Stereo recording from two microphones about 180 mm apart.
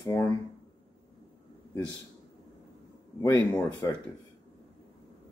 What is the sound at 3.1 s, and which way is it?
Speech, 15° left (ahead or behind).